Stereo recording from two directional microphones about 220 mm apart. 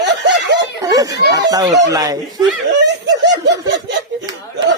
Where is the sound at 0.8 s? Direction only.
15° right (ahead or behind).